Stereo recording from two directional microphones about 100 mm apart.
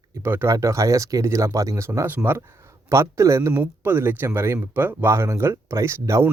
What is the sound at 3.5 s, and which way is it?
Speech, 20° right (ahead or behind).